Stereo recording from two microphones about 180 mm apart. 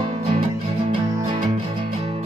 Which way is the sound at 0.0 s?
35° right (ahead or behind).